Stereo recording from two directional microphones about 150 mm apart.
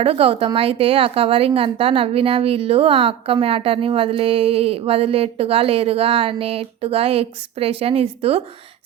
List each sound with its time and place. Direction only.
0.0 s a woman's voice: 40° right (ahead or behind)